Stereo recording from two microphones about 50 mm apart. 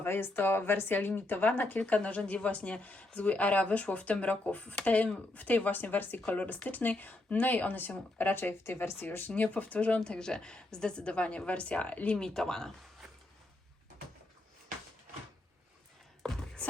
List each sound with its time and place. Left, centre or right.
0.0 s speech: left
9.0 s speech: left
12.1 s speech: centre
16.2 s a sound: centre
16.6 s music: left